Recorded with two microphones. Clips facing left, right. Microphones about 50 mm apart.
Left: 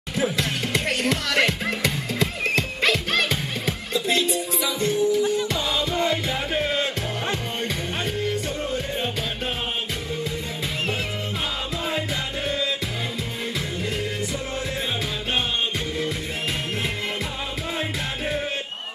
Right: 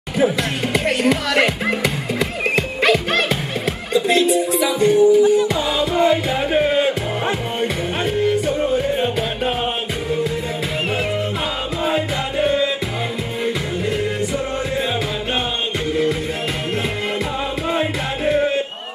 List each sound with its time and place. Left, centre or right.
0.2 s music: centre
11.8 s music: right
17.7 s music: right